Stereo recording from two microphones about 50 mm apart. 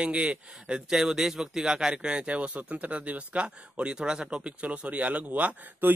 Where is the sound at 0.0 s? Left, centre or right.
Right.